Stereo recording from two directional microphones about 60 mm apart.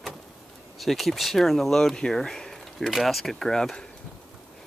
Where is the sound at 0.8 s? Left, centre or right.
Centre.